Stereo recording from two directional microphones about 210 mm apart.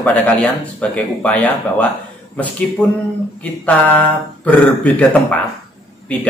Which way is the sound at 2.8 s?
5° left (ahead or behind).